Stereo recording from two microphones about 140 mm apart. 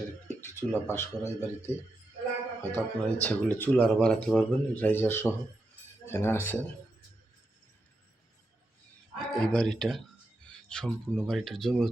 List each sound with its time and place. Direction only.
0.4 s speech: 15° left (ahead or behind)
2.7 s speech: 10° left (ahead or behind)
9.1 s speech: 5° left (ahead or behind)